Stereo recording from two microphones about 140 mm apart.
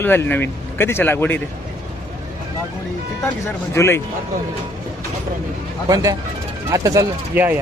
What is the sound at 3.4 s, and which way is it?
Speech, 20° left (ahead or behind).